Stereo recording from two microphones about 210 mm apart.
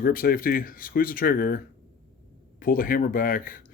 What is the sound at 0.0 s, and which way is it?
Speech, 45° left (ahead or behind).